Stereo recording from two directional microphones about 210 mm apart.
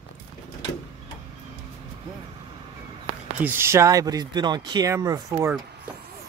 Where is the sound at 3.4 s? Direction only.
10° right (ahead or behind).